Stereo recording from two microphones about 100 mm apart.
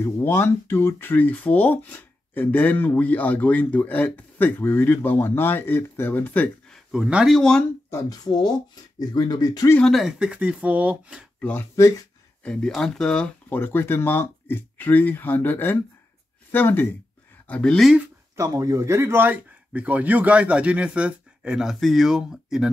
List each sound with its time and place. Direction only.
0.0 s speech: 25° left (ahead or behind)
6.9 s speech: 10° right (ahead or behind)
7.3 s speech: 5° left (ahead or behind)
7.9 s speech: 40° left (ahead or behind)
9.8 s speech: 5° left (ahead or behind)
11.7 s speech: 30° left (ahead or behind)
12.4 s speech: 5° left (ahead or behind)
13.5 s speech: 20° left (ahead or behind)
17.5 s speech: 10° left (ahead or behind)
18.3 s speech: 30° right (ahead or behind); by 22.7 s 5° right (ahead or behind)